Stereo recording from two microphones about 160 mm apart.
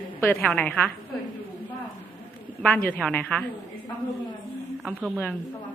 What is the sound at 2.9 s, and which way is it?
Speech, 10° left (ahead or behind).